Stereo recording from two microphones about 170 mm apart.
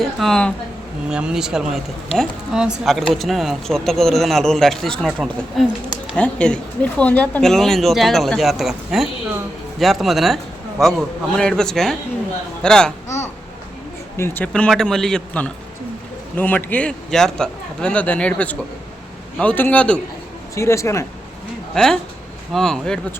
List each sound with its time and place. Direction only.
0.2 s speech: 5° left (ahead or behind)
13.1 s babbling: 15° left (ahead or behind)
14.2 s a man's voice: 10° left (ahead or behind)
21.7 s speech: 5° left (ahead or behind)